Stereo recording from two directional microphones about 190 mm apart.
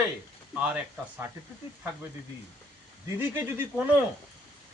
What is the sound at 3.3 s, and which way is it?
Speech, 15° right (ahead or behind).